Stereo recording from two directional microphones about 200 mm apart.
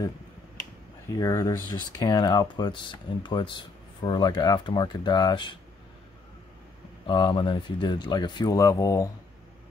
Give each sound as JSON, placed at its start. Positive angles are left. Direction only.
{"t": 1.0, "sound": "speech", "side_deg": 15}
{"t": 7.1, "sound": "speech", "side_deg": 25}